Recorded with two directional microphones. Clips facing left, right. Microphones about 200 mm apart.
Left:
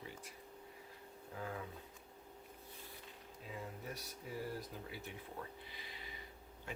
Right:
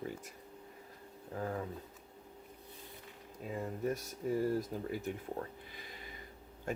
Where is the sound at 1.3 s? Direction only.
45° right (ahead or behind).